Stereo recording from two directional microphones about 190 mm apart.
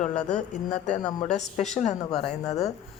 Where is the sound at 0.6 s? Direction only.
40° left (ahead or behind).